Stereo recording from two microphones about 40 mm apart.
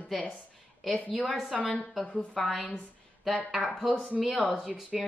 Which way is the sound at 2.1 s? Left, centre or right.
Centre.